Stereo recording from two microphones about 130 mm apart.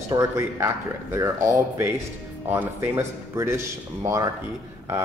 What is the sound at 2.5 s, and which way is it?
Speech, 15° right (ahead or behind).